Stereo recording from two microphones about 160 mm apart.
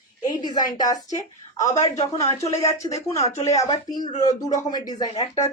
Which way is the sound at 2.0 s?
20° left (ahead or behind).